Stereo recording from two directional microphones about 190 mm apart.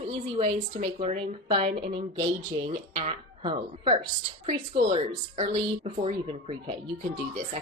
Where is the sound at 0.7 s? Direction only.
30° right (ahead or behind).